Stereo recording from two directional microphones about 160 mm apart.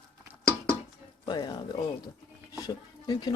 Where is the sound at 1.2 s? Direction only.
25° left (ahead or behind).